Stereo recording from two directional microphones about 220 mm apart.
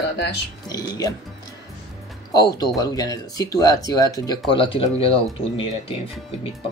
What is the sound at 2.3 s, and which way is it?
Speech, 20° left (ahead or behind).